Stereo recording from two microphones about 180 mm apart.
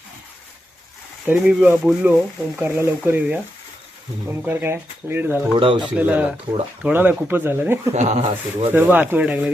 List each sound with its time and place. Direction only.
1.3 s speech: 10° right (ahead or behind)
5.5 s speech: 30° right (ahead or behind)
6.0 s speech: 10° right (ahead or behind)
7.9 s speech: 40° right (ahead or behind)
8.7 s speech: 10° right (ahead or behind)